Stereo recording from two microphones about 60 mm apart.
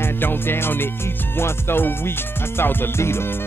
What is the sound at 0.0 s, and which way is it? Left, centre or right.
Music, left.